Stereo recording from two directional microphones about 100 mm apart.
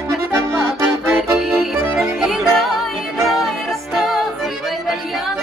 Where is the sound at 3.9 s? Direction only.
5° right (ahead or behind).